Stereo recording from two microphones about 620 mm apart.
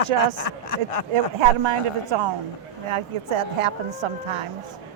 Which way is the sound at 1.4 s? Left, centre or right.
Right.